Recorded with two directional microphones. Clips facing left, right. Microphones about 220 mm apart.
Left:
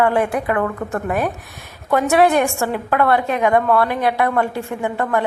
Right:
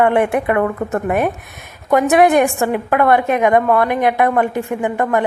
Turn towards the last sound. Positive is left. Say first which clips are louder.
# right 3 dB
turn(degrees=-20)  # may be behind; listen again after turning